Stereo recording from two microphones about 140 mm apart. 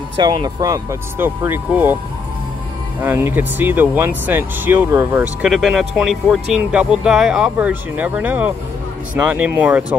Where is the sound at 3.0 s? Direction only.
15° right (ahead or behind).